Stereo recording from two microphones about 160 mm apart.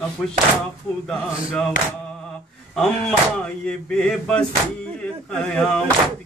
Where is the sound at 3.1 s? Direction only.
5° left (ahead or behind).